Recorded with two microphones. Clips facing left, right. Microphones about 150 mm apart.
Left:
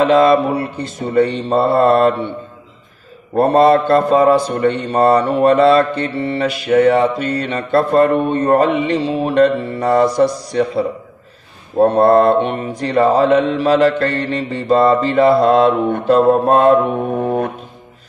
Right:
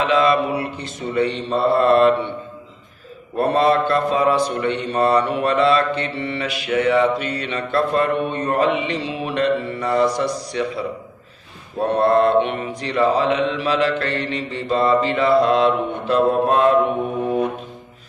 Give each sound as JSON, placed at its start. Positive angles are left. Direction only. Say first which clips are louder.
{"t": 0.0, "sound": "a man's voice", "louder": "left 6 dB", "side_deg": 45}
{"t": 3.3, "sound": "a man's voice", "louder": "left 6 dB", "side_deg": 45}